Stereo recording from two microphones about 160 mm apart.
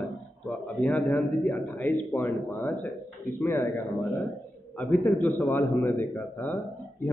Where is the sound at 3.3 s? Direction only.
15° left (ahead or behind).